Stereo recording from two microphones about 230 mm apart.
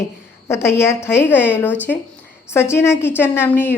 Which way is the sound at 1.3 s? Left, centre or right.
Centre.